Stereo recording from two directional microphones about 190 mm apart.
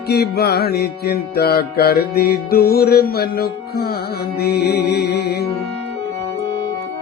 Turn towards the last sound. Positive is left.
turn(degrees=60)  # may be behind; listen again after turning